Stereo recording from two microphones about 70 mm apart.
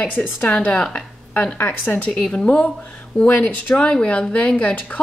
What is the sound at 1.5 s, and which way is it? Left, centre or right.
Speech, left.